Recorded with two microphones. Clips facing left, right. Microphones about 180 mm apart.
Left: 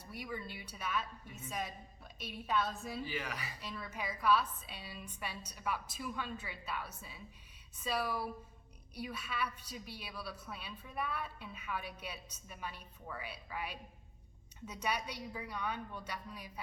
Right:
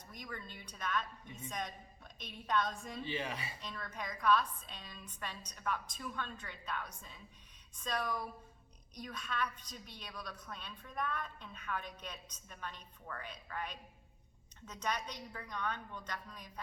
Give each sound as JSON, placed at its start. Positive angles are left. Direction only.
{"t": 0.0, "sound": "a woman's voice", "side_deg": 10}
{"t": 3.0, "sound": "speech", "side_deg": -25}
{"t": 3.6, "sound": "a woman's voice", "side_deg": 5}